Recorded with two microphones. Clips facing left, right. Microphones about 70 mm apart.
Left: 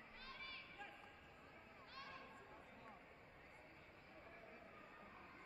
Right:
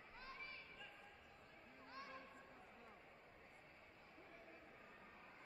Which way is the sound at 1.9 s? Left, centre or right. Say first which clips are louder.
Right 2 dB; right.